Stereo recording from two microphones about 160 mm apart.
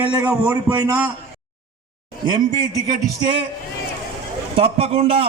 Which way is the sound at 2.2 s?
25° right (ahead or behind).